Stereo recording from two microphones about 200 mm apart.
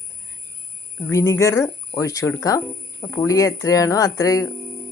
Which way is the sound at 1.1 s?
15° left (ahead or behind).